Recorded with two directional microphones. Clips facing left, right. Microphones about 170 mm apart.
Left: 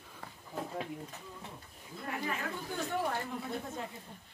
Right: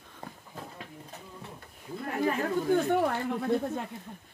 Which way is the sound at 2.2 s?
60° right (ahead or behind).